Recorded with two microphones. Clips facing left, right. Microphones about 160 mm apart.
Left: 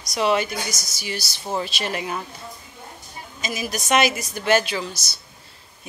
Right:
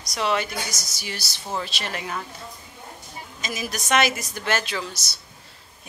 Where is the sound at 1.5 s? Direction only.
15° left (ahead or behind).